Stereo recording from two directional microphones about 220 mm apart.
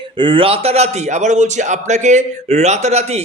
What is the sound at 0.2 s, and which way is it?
A man's voice, 25° right (ahead or behind).